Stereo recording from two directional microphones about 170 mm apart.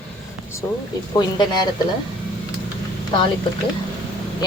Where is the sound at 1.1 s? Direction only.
25° left (ahead or behind).